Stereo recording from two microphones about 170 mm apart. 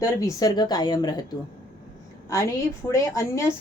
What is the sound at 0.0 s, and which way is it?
Speech, 20° left (ahead or behind).